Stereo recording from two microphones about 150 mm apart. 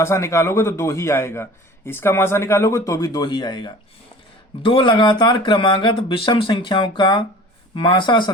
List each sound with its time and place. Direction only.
0.0 s a man's voice: 20° left (ahead or behind)